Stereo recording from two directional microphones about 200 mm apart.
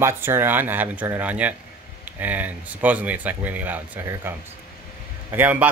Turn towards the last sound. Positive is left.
turn(degrees=-10)  # may be behind; listen again after turning